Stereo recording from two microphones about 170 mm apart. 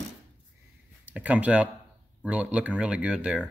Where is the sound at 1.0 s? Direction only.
10° right (ahead or behind).